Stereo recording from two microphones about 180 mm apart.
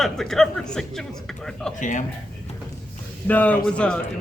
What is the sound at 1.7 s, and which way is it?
Speech, 45° left (ahead or behind).